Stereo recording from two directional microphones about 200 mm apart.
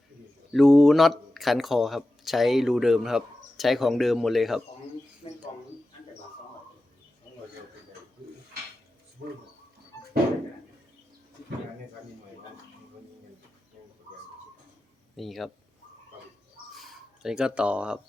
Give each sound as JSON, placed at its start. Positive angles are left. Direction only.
{"t": 0.5, "sound": "speech", "side_deg": 0}
{"t": 5.2, "sound": "mouse", "side_deg": 25}
{"t": 15.1, "sound": "speech", "side_deg": 0}
{"t": 16.7, "sound": "a sound", "side_deg": 0}